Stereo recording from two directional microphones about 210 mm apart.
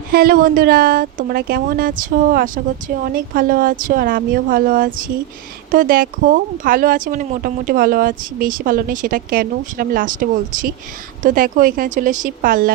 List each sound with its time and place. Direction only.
0.1 s speech: 45° right (ahead or behind)